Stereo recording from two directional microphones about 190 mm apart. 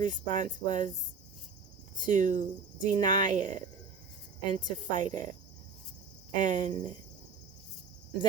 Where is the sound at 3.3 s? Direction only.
40° right (ahead or behind).